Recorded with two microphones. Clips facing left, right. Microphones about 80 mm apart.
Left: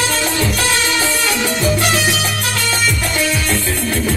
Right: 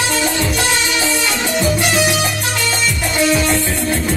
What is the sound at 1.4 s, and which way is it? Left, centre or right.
Salsa music, centre.